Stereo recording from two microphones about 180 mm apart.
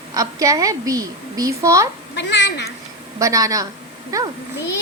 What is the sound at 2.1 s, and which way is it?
Speech, 75° left (ahead or behind).